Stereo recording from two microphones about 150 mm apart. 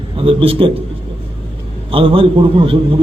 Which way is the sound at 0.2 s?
35° right (ahead or behind).